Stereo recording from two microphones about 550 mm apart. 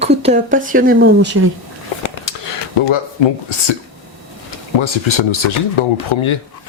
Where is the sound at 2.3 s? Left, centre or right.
Left.